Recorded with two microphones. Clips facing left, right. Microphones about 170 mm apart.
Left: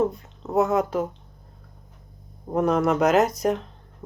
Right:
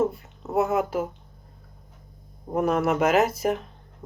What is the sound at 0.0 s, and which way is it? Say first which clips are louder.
Speech: left 1 dB; 5° right (ahead or behind).